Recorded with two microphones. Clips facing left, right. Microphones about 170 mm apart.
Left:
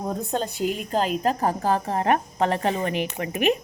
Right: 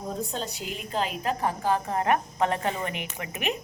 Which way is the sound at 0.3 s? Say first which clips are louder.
Left 8 dB; 55° left (ahead or behind).